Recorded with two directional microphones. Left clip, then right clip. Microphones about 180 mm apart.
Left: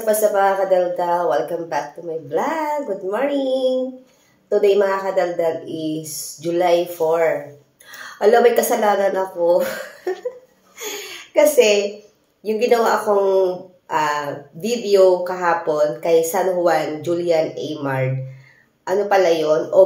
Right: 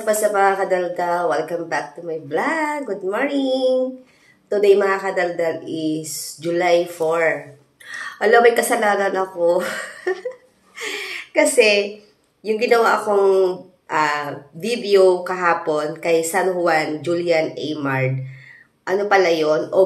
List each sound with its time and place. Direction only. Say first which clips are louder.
0.0 s speech: left 1 dB; 5° right (ahead or behind)